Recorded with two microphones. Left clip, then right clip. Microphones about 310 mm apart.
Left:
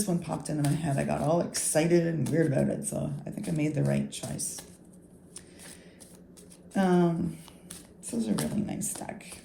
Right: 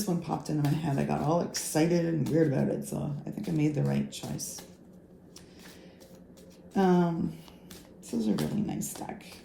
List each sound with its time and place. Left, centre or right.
0.0 s speech: left
6.7 s speech: left